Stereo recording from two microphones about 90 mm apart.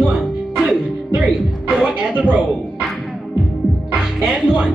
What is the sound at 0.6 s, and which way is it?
Music, 15° right (ahead or behind).